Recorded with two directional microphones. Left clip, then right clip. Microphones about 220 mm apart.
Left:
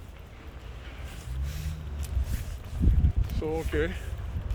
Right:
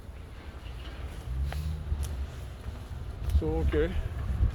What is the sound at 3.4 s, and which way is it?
Speech, 25° left (ahead or behind).